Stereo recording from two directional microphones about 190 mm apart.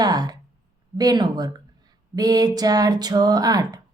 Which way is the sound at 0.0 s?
20° right (ahead or behind).